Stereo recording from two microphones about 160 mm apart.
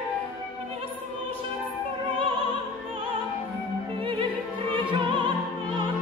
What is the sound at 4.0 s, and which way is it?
Music, 35° right (ahead or behind).